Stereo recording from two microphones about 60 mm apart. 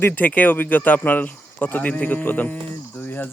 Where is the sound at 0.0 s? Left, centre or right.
Left.